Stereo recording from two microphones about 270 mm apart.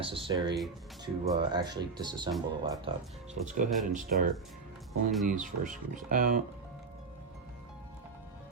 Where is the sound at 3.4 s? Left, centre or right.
Right.